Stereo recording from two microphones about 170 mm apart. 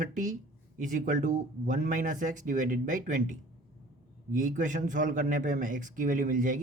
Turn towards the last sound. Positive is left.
turn(degrees=-50)  # may be behind; listen again after turning